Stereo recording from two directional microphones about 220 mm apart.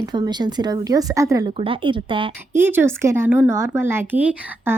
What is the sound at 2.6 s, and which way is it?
Speech, 10° right (ahead or behind).